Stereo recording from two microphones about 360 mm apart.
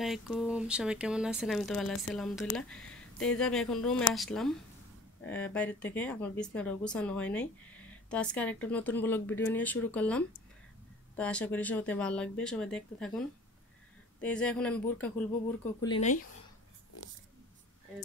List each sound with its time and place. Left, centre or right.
0.0 s speech: centre
14.2 s speech: centre
16.0 s speech: left